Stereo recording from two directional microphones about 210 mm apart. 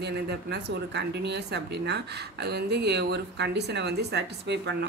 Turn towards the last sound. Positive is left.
turn(degrees=-55)  # may be behind; listen again after turning